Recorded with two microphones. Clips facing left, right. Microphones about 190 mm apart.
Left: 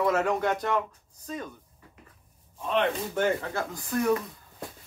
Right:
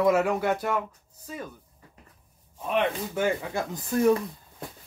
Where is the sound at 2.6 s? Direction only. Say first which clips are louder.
Even; 10° right (ahead or behind).